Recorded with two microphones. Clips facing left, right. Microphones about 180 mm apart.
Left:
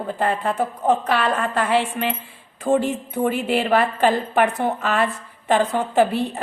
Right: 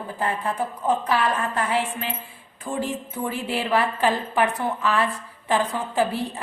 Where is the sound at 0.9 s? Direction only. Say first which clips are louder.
Left 2 dB; 65° left (ahead or behind).